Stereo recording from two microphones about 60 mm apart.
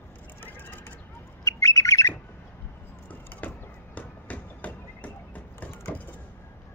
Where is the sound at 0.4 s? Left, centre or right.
Left.